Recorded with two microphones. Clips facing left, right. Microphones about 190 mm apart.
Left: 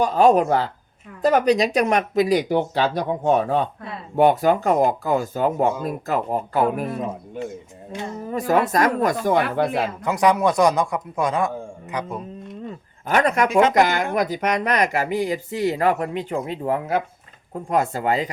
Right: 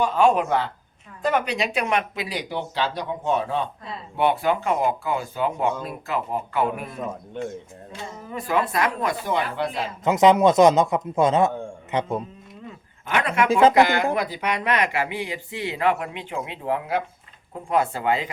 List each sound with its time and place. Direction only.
0.0 s speech: 40° left (ahead or behind)
7.4 s speech: 5° left (ahead or behind)
8.3 s speech: 40° left (ahead or behind)
10.0 s a man's voice: 20° right (ahead or behind)
13.1 s speech: 40° left (ahead or behind)